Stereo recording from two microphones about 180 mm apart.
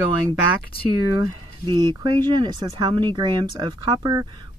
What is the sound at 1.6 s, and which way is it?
Speech, 25° right (ahead or behind).